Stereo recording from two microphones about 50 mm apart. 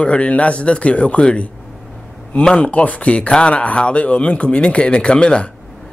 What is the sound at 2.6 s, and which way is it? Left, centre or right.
Speech, left.